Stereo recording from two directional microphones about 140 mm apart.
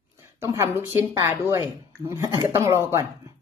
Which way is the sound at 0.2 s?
20° right (ahead or behind).